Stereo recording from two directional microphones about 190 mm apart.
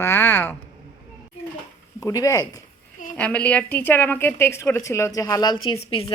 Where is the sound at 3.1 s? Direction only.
5° left (ahead or behind).